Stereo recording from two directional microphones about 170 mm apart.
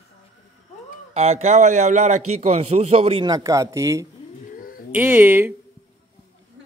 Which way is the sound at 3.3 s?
20° right (ahead or behind).